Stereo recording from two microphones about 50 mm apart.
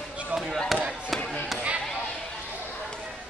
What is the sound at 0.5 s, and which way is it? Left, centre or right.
Chop, centre.